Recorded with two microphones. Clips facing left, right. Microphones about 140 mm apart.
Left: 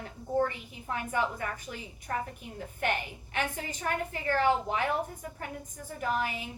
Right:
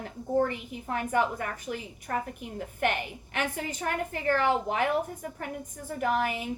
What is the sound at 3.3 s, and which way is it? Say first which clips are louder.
A woman's voice: right 2 dB; 50° right (ahead or behind).